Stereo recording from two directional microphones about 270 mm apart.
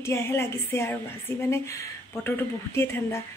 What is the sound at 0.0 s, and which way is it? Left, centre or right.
Speech, centre.